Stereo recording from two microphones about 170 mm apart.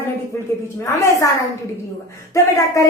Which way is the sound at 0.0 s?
15° left (ahead or behind).